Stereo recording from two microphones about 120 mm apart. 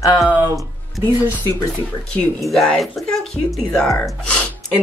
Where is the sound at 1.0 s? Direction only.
15° right (ahead or behind).